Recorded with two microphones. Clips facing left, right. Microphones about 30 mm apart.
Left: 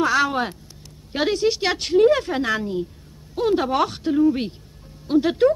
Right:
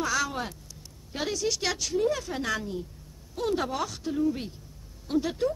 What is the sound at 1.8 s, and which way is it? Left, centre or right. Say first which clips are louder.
Speech: left 11 dB; left.